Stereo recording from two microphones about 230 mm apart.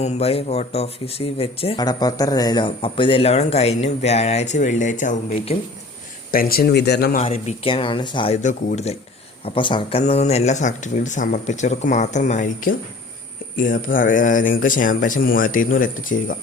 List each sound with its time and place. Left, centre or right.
0.0 s speech: left
7.2 s speech: left